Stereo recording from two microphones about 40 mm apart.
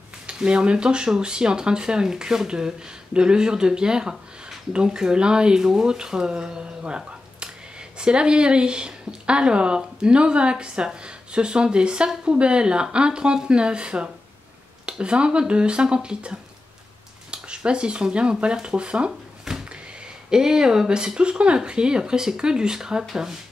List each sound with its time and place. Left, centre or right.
0.5 s speech: right
19.5 s a sound: centre
20.2 s speech: centre